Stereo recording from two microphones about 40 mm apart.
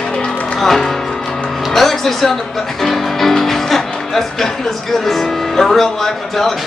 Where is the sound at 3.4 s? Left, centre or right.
Centre.